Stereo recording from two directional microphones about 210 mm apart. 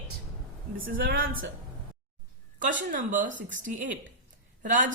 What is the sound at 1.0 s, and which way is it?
Speech, 45° right (ahead or behind).